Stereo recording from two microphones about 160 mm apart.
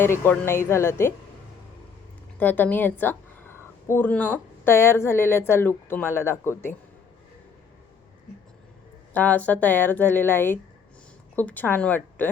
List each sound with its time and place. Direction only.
0.0 s a woman's voice: 15° left (ahead or behind)
2.4 s speech: 10° left (ahead or behind)
9.1 s a woman's voice: 10° left (ahead or behind)